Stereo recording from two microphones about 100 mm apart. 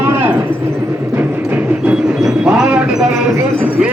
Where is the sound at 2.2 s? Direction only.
5° right (ahead or behind).